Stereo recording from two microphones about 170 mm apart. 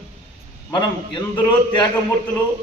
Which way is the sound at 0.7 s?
25° left (ahead or behind).